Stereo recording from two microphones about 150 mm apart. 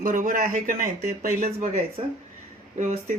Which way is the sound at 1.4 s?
45° right (ahead or behind).